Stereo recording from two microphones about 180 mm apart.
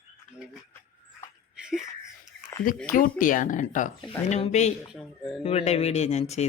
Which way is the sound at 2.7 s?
50° left (ahead or behind).